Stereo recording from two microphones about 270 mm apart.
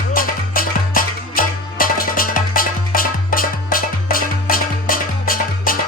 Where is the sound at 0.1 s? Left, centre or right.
Left.